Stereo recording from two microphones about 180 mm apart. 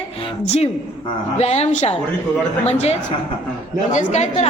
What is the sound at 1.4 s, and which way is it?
A woman's voice, 35° left (ahead or behind).